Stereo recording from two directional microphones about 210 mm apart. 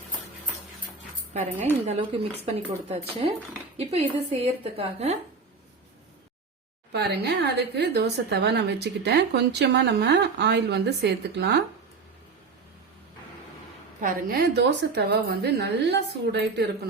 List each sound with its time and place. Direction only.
1.3 s a woman's voice: 35° right (ahead or behind)
3.8 s a woman's voice: 30° right (ahead or behind)
6.9 s a woman's voice: 50° right (ahead or behind)
14.0 s a woman's voice: 40° right (ahead or behind)